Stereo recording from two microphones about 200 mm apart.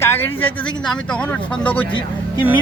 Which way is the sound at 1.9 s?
25° left (ahead or behind).